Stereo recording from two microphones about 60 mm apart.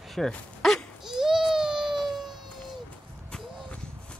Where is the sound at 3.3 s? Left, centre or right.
Centre.